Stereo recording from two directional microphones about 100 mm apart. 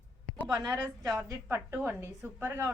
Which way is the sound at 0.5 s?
30° right (ahead or behind).